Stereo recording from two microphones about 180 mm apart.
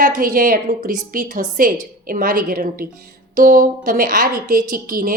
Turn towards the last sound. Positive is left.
turn(degrees=-50)  # may be behind; listen again after turning